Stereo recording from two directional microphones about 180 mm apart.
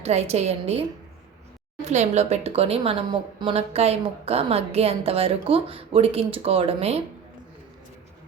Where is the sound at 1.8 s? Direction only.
40° right (ahead or behind).